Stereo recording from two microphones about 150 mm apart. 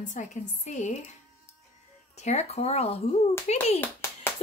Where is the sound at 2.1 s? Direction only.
45° left (ahead or behind).